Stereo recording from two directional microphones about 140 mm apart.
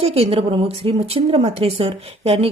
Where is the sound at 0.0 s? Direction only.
45° right (ahead or behind).